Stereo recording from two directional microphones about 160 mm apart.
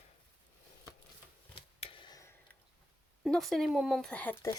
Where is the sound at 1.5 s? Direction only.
30° left (ahead or behind).